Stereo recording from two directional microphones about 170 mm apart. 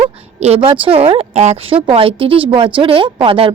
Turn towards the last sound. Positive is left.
turn(degrees=-30)  # may be behind; listen again after turning